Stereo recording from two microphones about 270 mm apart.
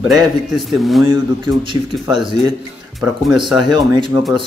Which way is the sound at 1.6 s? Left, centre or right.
Centre.